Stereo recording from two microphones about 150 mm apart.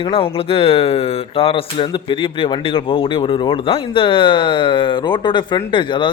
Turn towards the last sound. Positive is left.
turn(degrees=30)  # may be behind; listen again after turning